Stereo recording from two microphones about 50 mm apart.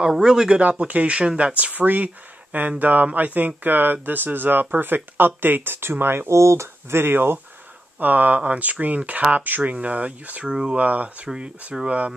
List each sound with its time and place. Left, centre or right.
0.0 s speech: centre
0.6 s speech: right
6.3 s speech: right
8.0 s speech: right
10.4 s speech: centre
10.8 s speech: right